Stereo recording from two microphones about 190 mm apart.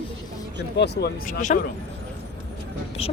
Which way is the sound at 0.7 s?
60° left (ahead or behind).